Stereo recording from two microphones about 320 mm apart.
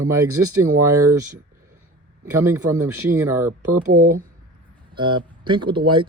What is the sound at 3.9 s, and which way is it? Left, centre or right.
Speech, right.